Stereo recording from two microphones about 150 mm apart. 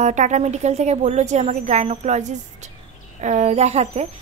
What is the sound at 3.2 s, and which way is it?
Speech, 50° right (ahead or behind).